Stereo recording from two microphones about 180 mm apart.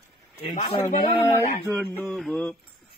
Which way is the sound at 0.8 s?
15° left (ahead or behind).